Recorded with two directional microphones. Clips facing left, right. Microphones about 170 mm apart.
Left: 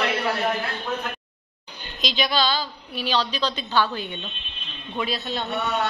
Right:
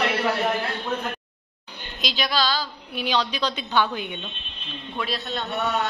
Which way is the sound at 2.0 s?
5° right (ahead or behind).